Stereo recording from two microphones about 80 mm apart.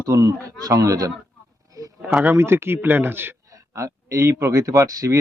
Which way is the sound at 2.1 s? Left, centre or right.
Right.